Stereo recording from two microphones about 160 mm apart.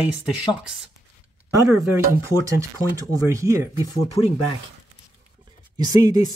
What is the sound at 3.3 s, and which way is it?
Speech, 20° right (ahead or behind).